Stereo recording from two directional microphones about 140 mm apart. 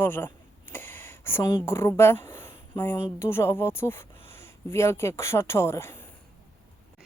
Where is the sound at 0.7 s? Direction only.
15° left (ahead or behind).